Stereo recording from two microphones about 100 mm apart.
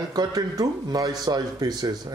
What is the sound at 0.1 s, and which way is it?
Speech, 40° right (ahead or behind).